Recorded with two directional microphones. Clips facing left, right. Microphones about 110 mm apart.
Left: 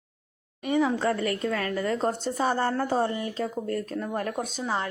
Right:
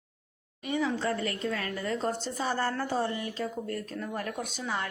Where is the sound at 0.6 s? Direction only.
50° left (ahead or behind).